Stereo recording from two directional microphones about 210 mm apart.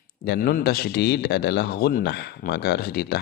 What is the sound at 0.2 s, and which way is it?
A man's voice, 50° left (ahead or behind).